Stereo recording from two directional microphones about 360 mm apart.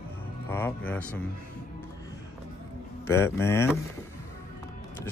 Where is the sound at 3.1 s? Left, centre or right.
Centre.